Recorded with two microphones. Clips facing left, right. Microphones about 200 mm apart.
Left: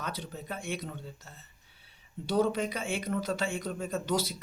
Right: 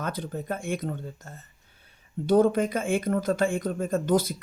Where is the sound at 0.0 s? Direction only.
50° right (ahead or behind).